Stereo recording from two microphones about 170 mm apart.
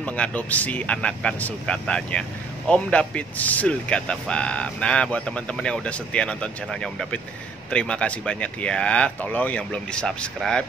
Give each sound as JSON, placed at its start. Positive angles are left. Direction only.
{"t": 0.0, "sound": "speech", "side_deg": 10}